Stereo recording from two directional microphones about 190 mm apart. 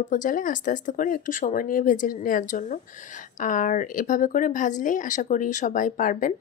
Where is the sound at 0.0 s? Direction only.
45° left (ahead or behind).